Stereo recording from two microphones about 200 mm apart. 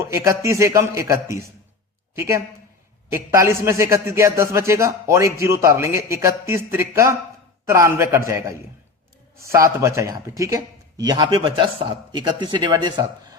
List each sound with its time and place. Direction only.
0.0 s a man's voice: 15° right (ahead or behind)